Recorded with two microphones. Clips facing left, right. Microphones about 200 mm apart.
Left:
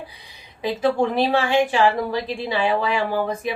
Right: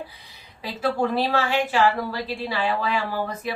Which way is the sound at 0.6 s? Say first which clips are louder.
Left 4 dB; 15° left (ahead or behind).